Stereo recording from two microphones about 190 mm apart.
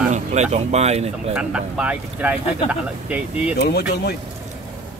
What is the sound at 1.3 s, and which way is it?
Speech, 5° right (ahead or behind).